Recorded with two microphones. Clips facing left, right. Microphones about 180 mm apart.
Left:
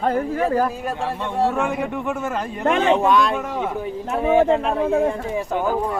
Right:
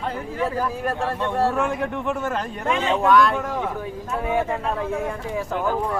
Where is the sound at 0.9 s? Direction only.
5° left (ahead or behind).